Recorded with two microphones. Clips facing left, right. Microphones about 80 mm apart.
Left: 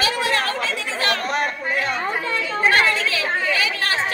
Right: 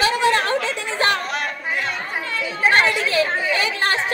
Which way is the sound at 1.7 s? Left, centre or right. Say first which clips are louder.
Left 5 dB; left.